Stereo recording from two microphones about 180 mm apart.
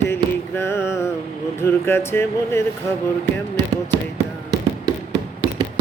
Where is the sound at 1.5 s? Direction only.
15° left (ahead or behind).